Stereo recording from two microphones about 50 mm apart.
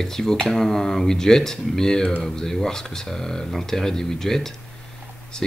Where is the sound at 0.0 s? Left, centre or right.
Centre.